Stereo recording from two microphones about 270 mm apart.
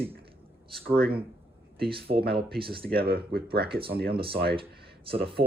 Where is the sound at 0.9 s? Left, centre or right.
Right.